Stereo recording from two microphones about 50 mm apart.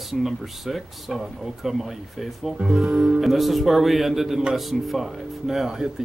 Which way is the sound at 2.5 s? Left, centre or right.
Centre.